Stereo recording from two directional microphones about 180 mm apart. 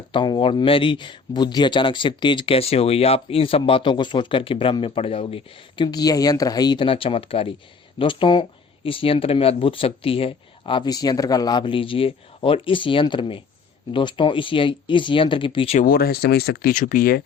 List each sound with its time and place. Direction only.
0.1 s speech: 25° left (ahead or behind)
15.8 s speech: 55° left (ahead or behind)